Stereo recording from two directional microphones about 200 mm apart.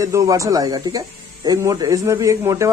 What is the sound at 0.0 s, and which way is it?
Speech, 15° right (ahead or behind).